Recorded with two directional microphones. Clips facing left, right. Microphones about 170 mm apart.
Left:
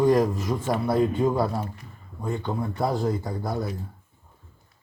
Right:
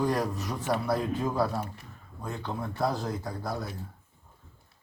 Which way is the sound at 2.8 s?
25° left (ahead or behind).